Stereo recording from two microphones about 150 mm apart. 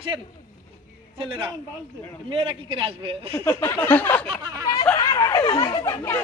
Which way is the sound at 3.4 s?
15° left (ahead or behind).